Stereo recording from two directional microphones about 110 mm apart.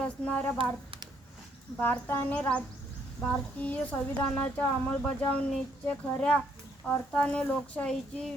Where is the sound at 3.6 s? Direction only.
15° left (ahead or behind).